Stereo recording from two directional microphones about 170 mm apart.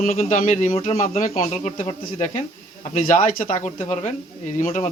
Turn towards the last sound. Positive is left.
turn(degrees=45)  # may be behind; listen again after turning